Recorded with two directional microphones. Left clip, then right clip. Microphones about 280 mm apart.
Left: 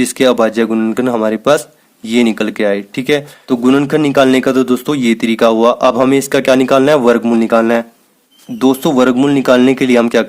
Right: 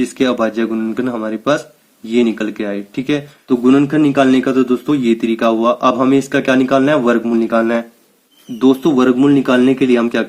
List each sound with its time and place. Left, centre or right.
0.0 s speech: left